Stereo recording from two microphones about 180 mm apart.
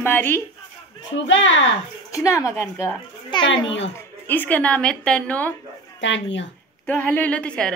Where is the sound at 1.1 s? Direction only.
90° left.